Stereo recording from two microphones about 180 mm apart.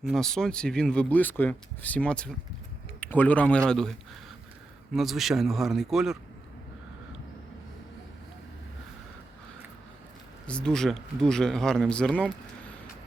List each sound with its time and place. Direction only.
0.0 s speech: centre (ahead or behind)
4.9 s speech: centre (ahead or behind)
10.4 s speech: 5° left (ahead or behind)